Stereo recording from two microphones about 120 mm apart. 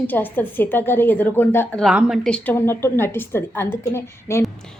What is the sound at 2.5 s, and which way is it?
A woman's voice, 20° left (ahead or behind).